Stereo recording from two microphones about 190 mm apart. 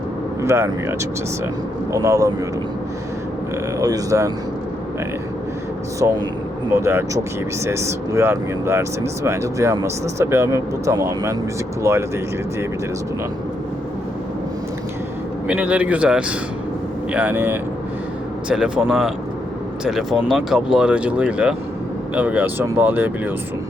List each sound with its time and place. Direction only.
0.4 s speech: 15° right (ahead or behind)
3.8 s speech: 20° right (ahead or behind)
6.0 s speech: 15° right (ahead or behind)
15.4 s speech: 10° right (ahead or behind)